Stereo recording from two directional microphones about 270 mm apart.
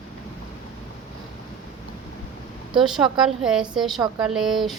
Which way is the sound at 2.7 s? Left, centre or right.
Centre.